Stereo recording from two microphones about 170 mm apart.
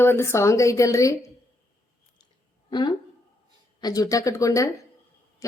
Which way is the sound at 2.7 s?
25° left (ahead or behind).